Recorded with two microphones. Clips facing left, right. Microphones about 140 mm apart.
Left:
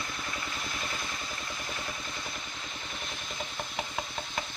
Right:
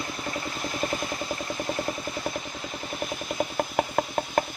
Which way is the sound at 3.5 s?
50° right (ahead or behind).